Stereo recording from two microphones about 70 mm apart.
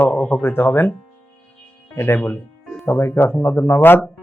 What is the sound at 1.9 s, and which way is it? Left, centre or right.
Speech, left.